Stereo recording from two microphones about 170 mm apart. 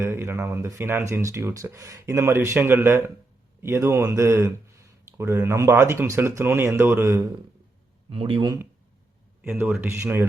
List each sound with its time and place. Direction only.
0.0 s speech: 15° right (ahead or behind)
8.1 s speech: 30° right (ahead or behind)
9.4 s speech: 10° right (ahead or behind)